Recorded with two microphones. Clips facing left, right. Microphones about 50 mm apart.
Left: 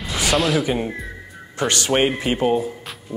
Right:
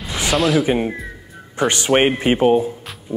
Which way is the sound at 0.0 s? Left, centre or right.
Centre.